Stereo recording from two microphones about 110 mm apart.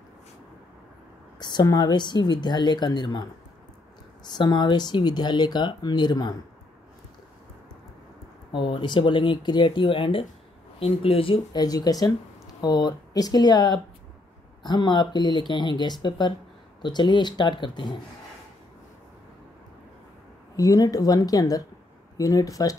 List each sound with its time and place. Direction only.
1.4 s speech: 40° left (ahead or behind)
8.5 s speech: 50° left (ahead or behind)
11.5 s speech: 35° left (ahead or behind)
20.5 s speech: 35° left (ahead or behind)